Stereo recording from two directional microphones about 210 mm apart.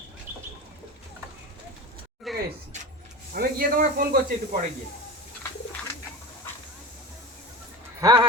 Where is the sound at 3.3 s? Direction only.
45° right (ahead or behind).